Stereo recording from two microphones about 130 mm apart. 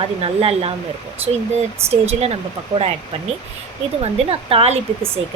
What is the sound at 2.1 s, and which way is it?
Speech, 50° right (ahead or behind).